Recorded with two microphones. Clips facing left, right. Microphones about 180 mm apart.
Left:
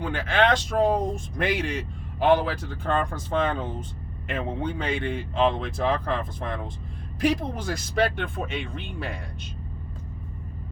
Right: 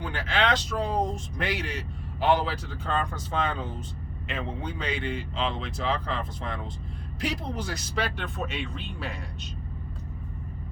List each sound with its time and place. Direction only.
0.0 s speech: 55° left (ahead or behind)
4.3 s speech: 55° left (ahead or behind)